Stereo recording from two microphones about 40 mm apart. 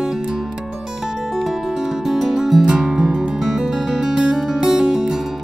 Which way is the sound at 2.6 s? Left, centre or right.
Centre.